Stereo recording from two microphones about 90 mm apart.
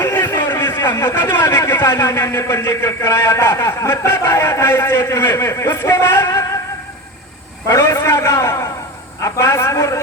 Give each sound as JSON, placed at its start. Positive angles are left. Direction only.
{"t": 0.0, "sound": "a sound", "side_deg": 25}
{"t": 2.0, "sound": "a man's voice", "side_deg": 35}
{"t": 7.7, "sound": "a man's voice", "side_deg": 35}